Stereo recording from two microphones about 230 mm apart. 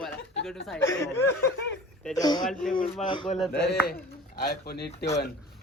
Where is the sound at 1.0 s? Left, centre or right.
Centre.